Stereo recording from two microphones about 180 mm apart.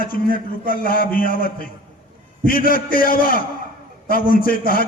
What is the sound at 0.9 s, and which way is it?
A man's voice, 55° left (ahead or behind).